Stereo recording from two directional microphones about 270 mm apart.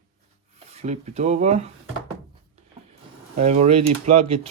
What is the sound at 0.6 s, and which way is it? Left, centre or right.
Speech, right.